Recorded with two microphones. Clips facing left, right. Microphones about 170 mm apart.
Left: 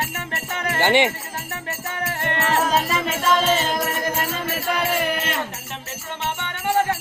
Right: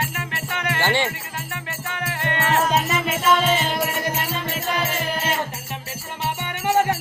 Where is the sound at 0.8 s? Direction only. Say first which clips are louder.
Left 5 dB; 20° left (ahead or behind).